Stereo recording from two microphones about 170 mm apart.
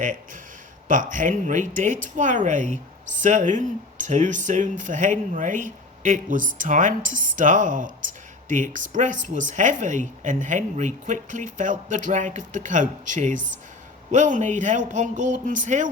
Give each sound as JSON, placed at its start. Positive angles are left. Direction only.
{"t": 0.9, "sound": "speech", "side_deg": -50}